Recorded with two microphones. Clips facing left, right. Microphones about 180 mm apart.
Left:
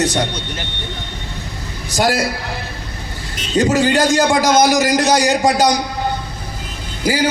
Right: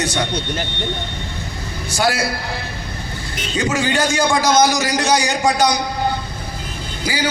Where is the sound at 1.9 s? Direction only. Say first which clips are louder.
Left 2 dB; 35° left (ahead or behind).